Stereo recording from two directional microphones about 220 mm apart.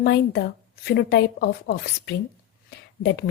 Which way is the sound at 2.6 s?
50° left (ahead or behind).